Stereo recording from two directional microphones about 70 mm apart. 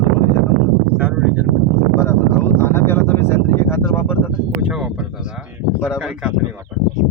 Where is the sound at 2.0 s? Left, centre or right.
Left.